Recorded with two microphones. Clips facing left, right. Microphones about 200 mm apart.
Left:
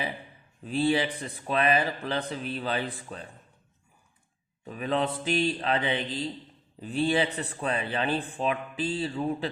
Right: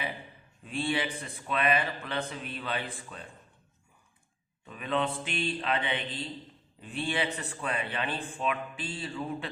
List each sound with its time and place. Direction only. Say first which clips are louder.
0.6 s speech: left 6 dB; 35° left (ahead or behind)
4.6 s speech: left 3 dB; 40° left (ahead or behind)